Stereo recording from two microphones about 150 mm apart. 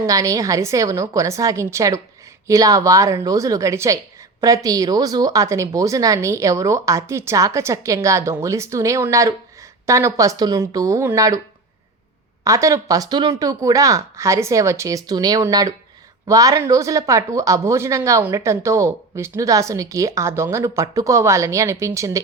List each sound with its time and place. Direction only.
0.0 s speech: 20° right (ahead or behind)
12.5 s speech: 20° right (ahead or behind)